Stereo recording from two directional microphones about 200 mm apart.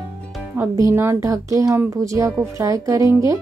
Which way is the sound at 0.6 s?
15° right (ahead or behind).